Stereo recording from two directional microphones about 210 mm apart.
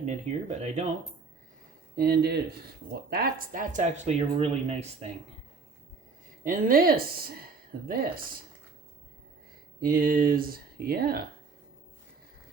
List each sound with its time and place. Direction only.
0.0 s speech: 30° right (ahead or behind)
2.0 s speech: 45° right (ahead or behind); by 5.0 s 30° right (ahead or behind)
6.4 s speech: 40° right (ahead or behind)
9.8 s speech: 45° right (ahead or behind)